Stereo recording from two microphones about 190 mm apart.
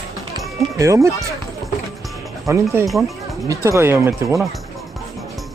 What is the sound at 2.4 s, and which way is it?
Speech, 15° right (ahead or behind).